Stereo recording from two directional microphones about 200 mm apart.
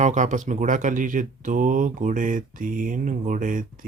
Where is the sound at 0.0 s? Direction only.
40° right (ahead or behind).